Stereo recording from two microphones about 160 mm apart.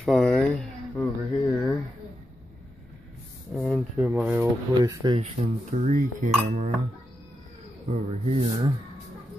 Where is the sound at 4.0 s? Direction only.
10° right (ahead or behind).